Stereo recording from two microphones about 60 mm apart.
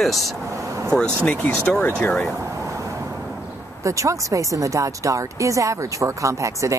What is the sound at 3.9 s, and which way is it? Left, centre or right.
Speech, right.